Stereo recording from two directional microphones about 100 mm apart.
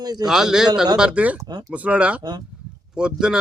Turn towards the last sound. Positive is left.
turn(degrees=-10)  # may be behind; listen again after turning